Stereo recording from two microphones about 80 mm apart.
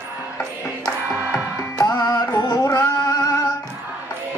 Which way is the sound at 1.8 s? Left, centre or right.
Left.